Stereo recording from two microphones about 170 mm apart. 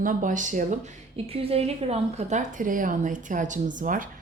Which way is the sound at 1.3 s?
35° right (ahead or behind).